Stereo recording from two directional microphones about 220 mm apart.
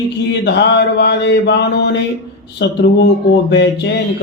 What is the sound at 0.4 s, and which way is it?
Speech, 50° left (ahead or behind).